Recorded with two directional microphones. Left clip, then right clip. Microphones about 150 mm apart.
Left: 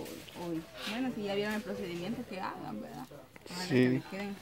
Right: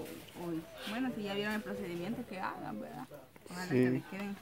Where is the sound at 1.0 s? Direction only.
Centre (ahead or behind).